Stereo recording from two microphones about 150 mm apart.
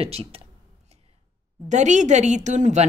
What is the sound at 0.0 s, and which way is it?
Speech, 40° right (ahead or behind).